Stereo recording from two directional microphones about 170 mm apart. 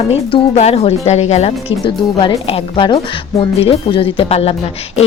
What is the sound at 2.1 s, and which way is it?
A woman's voice, 25° left (ahead or behind).